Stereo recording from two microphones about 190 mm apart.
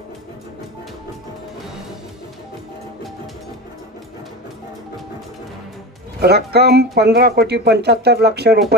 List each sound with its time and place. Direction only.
6.2 s speech: 60° right (ahead or behind)